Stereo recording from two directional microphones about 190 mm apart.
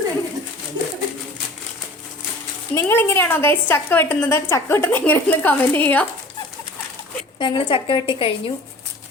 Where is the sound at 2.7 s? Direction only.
10° left (ahead or behind).